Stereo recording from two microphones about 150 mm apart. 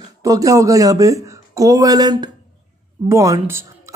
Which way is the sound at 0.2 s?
20° right (ahead or behind).